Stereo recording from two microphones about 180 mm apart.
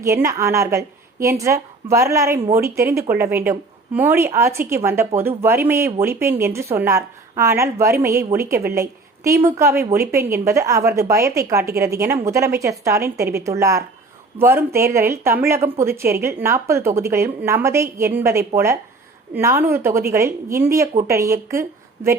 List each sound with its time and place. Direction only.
0.0 s a woman's voice: 15° right (ahead or behind)